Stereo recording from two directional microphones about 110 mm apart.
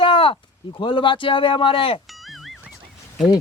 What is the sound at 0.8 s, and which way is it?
Speech, 50° left (ahead or behind).